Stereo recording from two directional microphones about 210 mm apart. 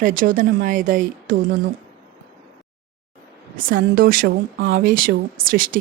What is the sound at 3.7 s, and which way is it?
Speech, 40° right (ahead or behind).